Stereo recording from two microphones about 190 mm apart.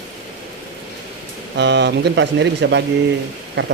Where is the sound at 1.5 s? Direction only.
65° right (ahead or behind).